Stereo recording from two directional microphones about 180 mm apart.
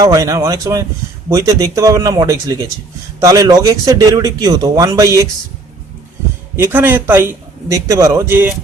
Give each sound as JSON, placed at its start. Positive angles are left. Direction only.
{"t": 0.0, "sound": "speech", "side_deg": -20}
{"t": 6.6, "sound": "a man's voice", "side_deg": -10}